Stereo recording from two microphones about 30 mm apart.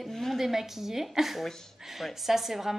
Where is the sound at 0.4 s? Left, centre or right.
Centre.